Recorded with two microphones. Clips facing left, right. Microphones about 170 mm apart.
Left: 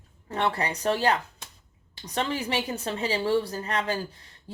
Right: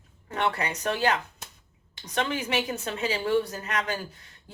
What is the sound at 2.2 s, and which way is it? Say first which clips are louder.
Speech: even; 30° left (ahead or behind).